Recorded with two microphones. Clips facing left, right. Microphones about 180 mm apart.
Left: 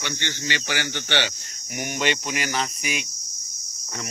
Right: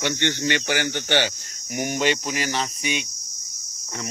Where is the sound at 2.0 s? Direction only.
35° right (ahead or behind).